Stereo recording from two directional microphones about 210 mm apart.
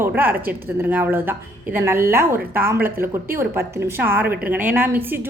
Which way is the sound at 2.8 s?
10° right (ahead or behind).